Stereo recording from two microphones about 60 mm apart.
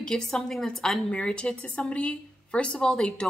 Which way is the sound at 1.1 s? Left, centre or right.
Centre.